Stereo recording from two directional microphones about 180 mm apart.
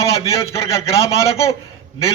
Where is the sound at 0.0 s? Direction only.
15° left (ahead or behind).